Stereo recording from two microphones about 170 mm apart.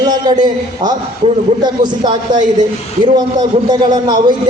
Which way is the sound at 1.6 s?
25° right (ahead or behind).